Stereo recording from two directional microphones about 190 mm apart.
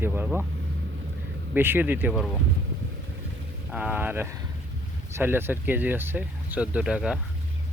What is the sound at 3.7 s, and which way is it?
Speech, 5° right (ahead or behind).